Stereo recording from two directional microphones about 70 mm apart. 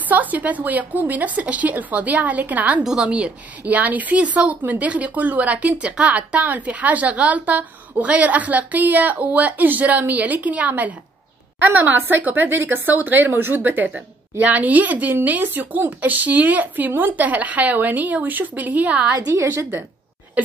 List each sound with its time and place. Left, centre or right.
0.1 s a woman's voice: right
2.8 s a woman's voice: centre; by 19.8 s right